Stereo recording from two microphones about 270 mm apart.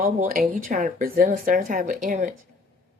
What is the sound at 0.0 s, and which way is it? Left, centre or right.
A woman's voice, right.